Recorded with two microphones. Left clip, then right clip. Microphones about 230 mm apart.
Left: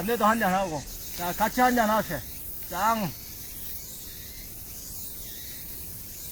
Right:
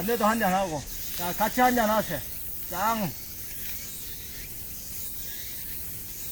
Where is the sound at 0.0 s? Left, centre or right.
Centre.